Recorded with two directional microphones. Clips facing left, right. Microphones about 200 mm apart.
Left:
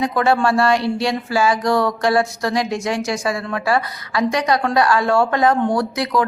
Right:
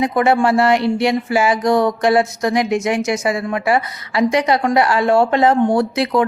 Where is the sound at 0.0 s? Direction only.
20° right (ahead or behind).